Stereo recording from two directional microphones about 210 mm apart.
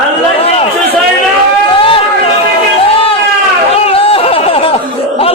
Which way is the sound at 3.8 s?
25° left (ahead or behind).